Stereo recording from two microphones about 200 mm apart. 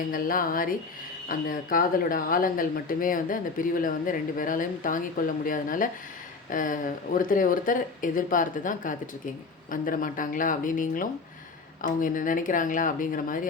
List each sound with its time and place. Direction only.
0.1 s speech: 45° left (ahead or behind)